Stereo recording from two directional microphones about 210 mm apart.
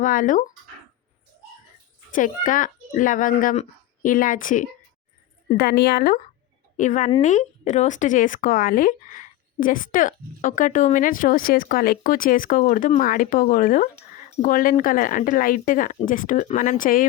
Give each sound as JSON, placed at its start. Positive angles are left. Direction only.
{"t": 0.0, "sound": "speech", "side_deg": 40}
{"t": 2.1, "sound": "speech", "side_deg": 40}
{"t": 6.7, "sound": "speech", "side_deg": 35}